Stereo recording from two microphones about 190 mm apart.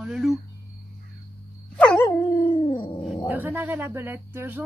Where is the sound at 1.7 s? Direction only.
5° left (ahead or behind).